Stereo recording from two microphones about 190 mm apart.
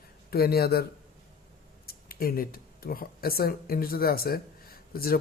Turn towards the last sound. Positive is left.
turn(degrees=50)  # may be behind; listen again after turning